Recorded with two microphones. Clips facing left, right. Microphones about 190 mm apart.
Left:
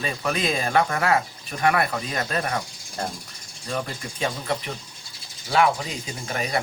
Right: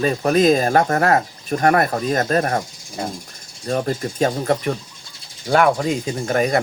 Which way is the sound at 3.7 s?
40° right (ahead or behind).